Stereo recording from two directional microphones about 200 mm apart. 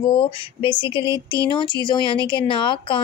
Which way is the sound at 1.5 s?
20° left (ahead or behind).